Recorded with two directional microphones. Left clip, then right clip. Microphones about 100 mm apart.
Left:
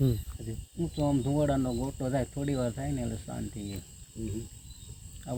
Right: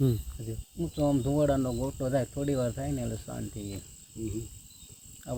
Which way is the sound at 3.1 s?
25° right (ahead or behind).